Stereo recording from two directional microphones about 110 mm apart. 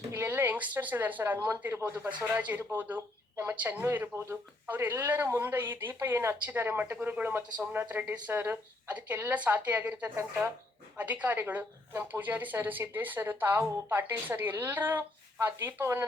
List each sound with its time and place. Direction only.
0.1 s a woman's voice: 20° right (ahead or behind)